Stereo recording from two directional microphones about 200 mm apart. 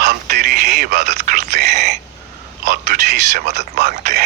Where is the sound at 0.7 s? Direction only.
55° right (ahead or behind).